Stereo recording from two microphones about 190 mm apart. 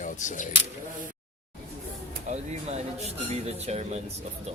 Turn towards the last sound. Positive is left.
turn(degrees=-35)  # may be behind; listen again after turning